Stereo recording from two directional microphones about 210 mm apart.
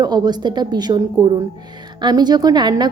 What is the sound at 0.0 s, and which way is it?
A woman's voice, 20° right (ahead or behind).